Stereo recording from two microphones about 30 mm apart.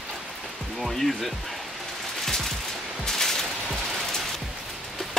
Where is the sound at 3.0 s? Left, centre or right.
Centre.